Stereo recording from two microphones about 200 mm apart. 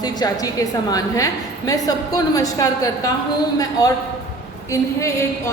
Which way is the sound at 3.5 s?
20° left (ahead or behind).